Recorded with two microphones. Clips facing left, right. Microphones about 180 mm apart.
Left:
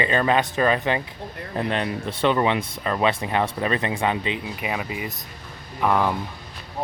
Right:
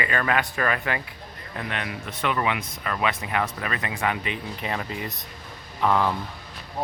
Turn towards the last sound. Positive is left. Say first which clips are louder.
# left 1 dB
turn(degrees=10)  # may be behind; listen again after turning